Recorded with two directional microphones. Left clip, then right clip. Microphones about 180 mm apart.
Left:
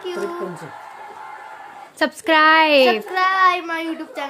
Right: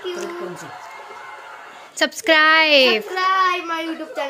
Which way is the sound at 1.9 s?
10° left (ahead or behind).